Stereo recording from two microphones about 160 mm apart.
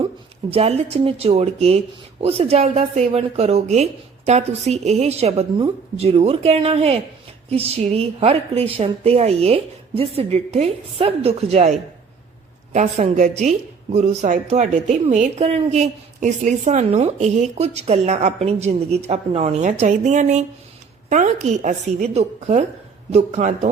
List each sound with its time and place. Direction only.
0.5 s a woman's voice: 40° right (ahead or behind)
12.7 s a woman's voice: 50° right (ahead or behind)